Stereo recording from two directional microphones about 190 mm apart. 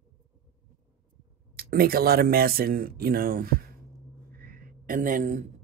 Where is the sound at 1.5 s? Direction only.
50° right (ahead or behind).